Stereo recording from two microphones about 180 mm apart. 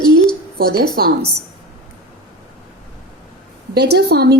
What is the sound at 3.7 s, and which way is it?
Speech, 65° right (ahead or behind).